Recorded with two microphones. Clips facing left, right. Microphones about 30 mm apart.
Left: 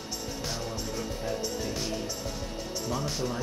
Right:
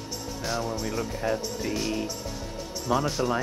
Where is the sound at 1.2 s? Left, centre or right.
Right.